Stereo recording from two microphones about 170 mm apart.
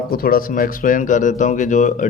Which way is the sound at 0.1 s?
60° left (ahead or behind).